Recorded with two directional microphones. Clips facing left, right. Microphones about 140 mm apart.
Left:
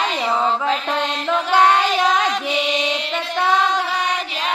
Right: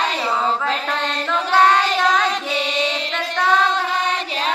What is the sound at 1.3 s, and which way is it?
Female singing, 10° left (ahead or behind).